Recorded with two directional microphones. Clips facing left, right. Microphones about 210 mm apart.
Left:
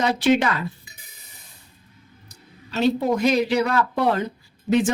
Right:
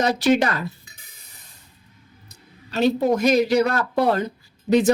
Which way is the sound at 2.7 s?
45° right (ahead or behind).